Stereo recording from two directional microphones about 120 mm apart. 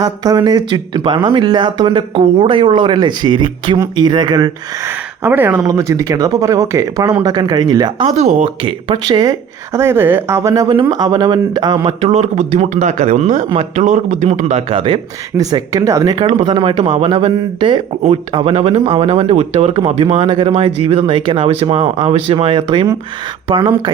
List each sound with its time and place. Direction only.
0.0 s speech: 30° right (ahead or behind)
4.8 s speech: 15° right (ahead or behind)
5.6 s speech: 30° right (ahead or behind)
8.1 s speech: 65° right (ahead or behind)
8.6 s speech: 40° right (ahead or behind)
9.7 s speech: 20° right (ahead or behind); by 11.9 s 40° right (ahead or behind)
11.9 s a man's voice: 65° right (ahead or behind)
14.7 s speech: 50° right (ahead or behind)
15.4 s speech: 30° right (ahead or behind)
16.4 s speech: 45° right (ahead or behind)
18.0 s speech: 55° right (ahead or behind); by 23.9 s 40° right (ahead or behind)